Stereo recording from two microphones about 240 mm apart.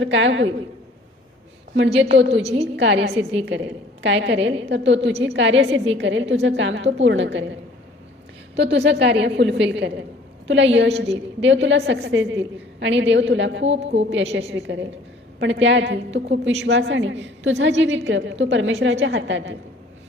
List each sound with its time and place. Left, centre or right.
0.0 s a woman's voice: right
2.0 s a woman's voice: right
2.4 s a woman's voice: right
2.7 s a woman's voice: right
8.5 s a woman's voice: right